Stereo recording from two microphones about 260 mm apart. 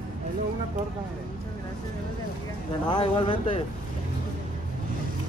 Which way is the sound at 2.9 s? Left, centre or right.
Centre.